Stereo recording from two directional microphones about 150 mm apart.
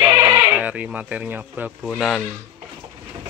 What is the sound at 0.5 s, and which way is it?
Speech, 10° right (ahead or behind).